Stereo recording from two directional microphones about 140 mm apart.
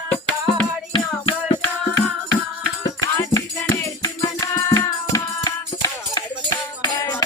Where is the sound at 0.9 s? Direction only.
40° left (ahead or behind).